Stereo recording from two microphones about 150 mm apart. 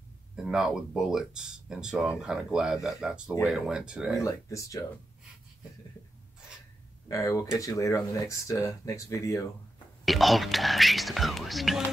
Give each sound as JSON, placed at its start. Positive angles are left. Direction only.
{"t": 0.4, "sound": "speech", "side_deg": -5}
{"t": 4.2, "sound": "speech", "side_deg": 20}
{"t": 7.1, "sound": "speech", "side_deg": 20}
{"t": 10.0, "sound": "speech", "side_deg": 0}